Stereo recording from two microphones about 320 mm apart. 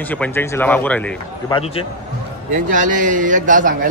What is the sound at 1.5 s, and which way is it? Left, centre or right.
Speech, centre.